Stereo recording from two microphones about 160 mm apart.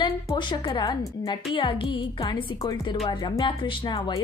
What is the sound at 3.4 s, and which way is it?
Speech, 30° left (ahead or behind).